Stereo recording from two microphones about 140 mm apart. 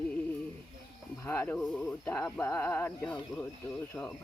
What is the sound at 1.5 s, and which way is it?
A woman's voice, 5° left (ahead or behind).